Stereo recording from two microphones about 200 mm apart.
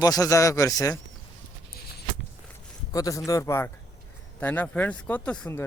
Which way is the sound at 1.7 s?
50° left (ahead or behind).